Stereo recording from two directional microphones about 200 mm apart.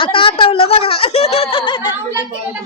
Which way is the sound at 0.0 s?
25° left (ahead or behind).